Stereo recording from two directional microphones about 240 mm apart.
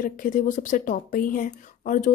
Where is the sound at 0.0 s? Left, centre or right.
Left.